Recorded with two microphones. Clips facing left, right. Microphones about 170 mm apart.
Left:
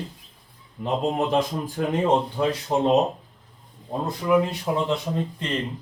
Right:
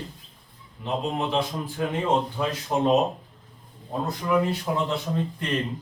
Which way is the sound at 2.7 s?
15° left (ahead or behind).